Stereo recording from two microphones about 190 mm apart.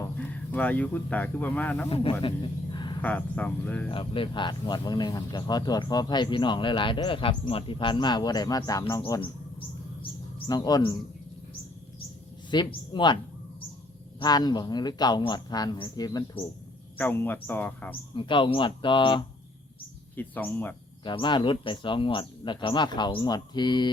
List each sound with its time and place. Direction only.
0.2 s speech: 10° left (ahead or behind)
2.7 s a sound: 20° left (ahead or behind)
3.0 s speech: 10° left (ahead or behind)
3.9 s speech: 30° left (ahead or behind)
12.5 s speech: 25° left (ahead or behind)
14.2 s speech: 20° left (ahead or behind)
18.1 s speech: 25° left (ahead or behind)
20.1 s speech: 10° left (ahead or behind)
21.0 s speech: 25° left (ahead or behind)